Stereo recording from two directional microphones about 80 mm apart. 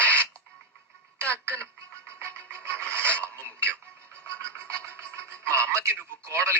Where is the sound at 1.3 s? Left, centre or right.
Right.